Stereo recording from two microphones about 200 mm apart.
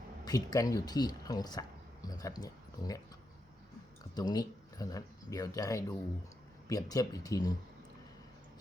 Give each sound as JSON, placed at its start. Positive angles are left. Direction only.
{"t": 0.3, "sound": "speech", "side_deg": 20}
{"t": 4.1, "sound": "speech", "side_deg": 20}